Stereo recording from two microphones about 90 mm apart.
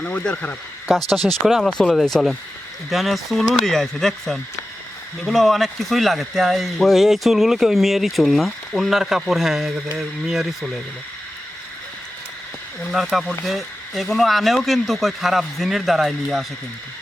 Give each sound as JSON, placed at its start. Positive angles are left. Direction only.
{"t": 0.0, "sound": "speech", "side_deg": 15}
{"t": 0.9, "sound": "speech", "side_deg": 5}
{"t": 12.9, "sound": "speech", "side_deg": -5}